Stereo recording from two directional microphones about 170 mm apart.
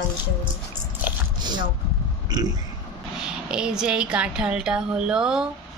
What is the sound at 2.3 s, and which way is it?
Speech, 25° right (ahead or behind).